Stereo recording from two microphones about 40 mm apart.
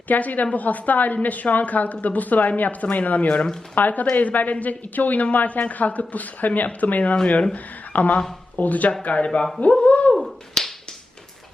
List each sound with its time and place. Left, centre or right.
0.1 s a woman's voice: left
8.9 s speech: left
9.8 s a sound: left
10.2 s finger snapping: centre